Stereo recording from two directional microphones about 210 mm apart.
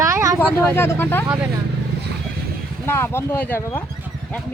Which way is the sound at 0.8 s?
10° left (ahead or behind).